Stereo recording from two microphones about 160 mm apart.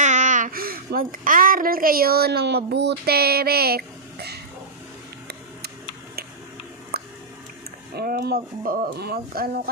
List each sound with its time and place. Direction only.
0.0 s a child's voice: 50° right (ahead or behind); by 4.4 s 85° right
6.9 s a sound: 75° right (ahead or behind)
7.9 s speech: 75° right (ahead or behind)